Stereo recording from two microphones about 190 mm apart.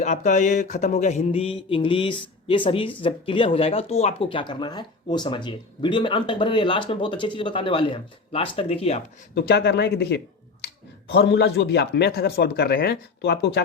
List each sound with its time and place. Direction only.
0.0 s speech: 40° left (ahead or behind)
9.3 s speech: 60° left (ahead or behind)